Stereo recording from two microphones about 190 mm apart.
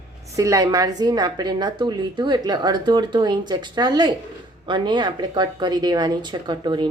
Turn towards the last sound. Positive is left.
turn(degrees=-25)  # may be behind; listen again after turning